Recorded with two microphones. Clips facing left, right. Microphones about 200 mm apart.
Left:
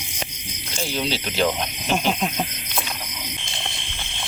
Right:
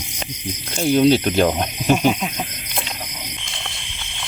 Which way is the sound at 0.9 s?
50° right (ahead or behind).